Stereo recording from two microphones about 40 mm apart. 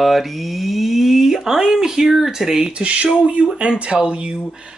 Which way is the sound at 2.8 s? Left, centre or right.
Right.